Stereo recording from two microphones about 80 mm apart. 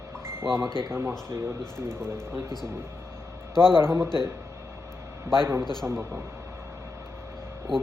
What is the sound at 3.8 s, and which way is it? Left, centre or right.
Speech, right.